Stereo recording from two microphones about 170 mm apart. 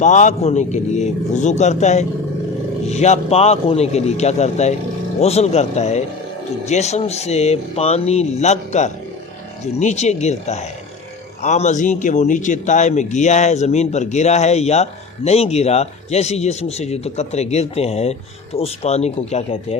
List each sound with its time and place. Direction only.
0.0 s a man's voice: 45° left (ahead or behind)